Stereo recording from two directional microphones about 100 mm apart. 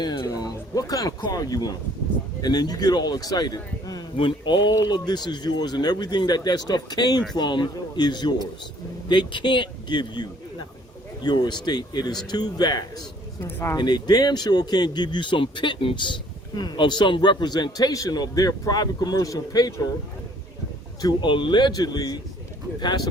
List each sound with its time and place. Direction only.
0.0 s a man's voice: 45° left (ahead or behind)
13.4 s speech: 25° left (ahead or behind)
13.7 s speech: 45° left (ahead or behind)
16.6 s a man's voice: 45° left (ahead or behind)
21.0 s speech: 50° left (ahead or behind)